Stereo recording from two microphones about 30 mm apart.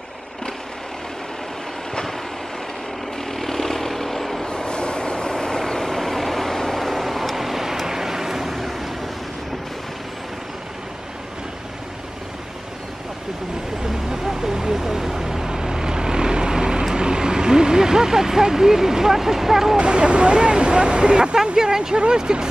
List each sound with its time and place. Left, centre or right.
3.3 s vehicle: centre
4.5 s vehicle: left; by 6.9 s centre
6.9 s vehicle: centre
13.8 s vehicle: centre
19.8 s a sound: right
21.5 s a sound: right
21.9 s speech: right